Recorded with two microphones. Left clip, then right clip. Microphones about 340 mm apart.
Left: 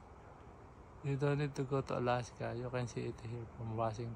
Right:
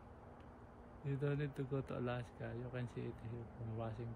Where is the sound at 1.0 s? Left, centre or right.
Centre.